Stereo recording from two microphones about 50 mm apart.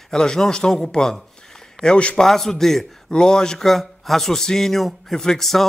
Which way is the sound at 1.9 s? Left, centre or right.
Left.